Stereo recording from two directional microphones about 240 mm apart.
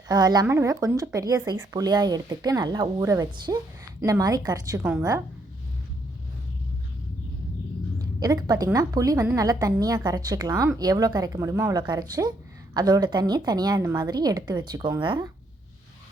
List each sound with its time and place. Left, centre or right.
0.1 s a woman's voice: centre
7.9 s a woman's voice: centre